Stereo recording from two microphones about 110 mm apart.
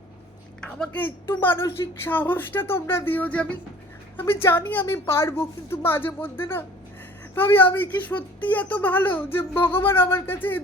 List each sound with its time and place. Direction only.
0.6 s a woman's voice: 5° left (ahead or behind)
1.0 s a woman's voice: 20° left (ahead or behind)